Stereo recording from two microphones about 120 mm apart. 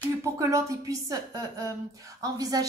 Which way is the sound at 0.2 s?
25° right (ahead or behind).